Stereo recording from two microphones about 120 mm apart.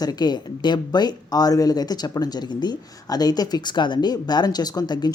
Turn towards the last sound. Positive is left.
turn(degrees=35)  # may be behind; listen again after turning